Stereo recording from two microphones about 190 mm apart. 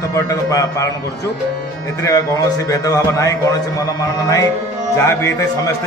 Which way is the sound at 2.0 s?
20° left (ahead or behind).